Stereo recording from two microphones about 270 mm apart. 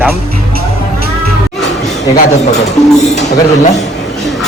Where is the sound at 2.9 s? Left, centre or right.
Centre.